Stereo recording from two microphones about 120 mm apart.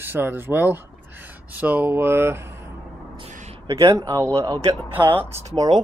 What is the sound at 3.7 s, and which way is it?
A man's voice, 25° right (ahead or behind).